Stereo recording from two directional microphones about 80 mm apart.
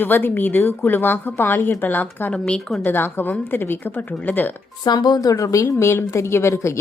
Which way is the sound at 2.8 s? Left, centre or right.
Left.